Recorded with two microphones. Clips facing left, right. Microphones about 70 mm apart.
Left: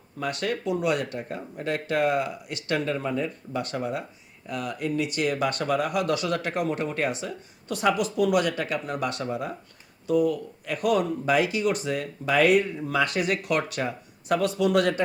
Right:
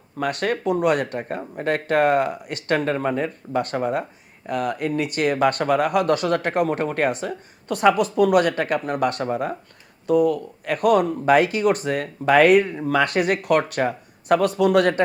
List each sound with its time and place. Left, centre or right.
0.2 s speech: right